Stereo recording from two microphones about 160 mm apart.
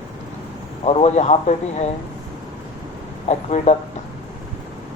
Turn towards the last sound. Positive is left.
turn(degrees=45)  # may be behind; listen again after turning